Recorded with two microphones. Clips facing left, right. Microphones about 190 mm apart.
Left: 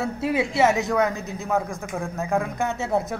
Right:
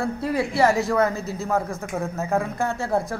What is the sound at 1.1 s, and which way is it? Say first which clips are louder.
Speech: right 3 dB; 15° left (ahead or behind).